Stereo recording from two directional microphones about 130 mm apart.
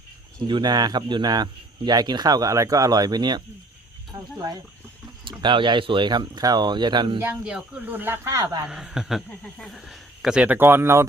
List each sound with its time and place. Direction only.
0.3 s speech: 35° right (ahead or behind)
7.4 s speech: 10° right (ahead or behind)
8.6 s speech: 5° right (ahead or behind)